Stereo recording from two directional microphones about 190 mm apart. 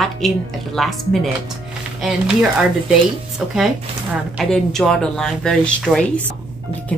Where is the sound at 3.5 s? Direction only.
Centre (ahead or behind).